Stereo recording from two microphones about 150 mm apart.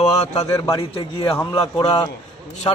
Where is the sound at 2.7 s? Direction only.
25° left (ahead or behind).